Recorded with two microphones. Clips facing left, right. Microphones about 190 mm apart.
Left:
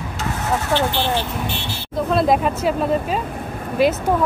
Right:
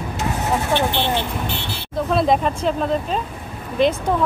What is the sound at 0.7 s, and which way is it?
Speech, 20° right (ahead or behind).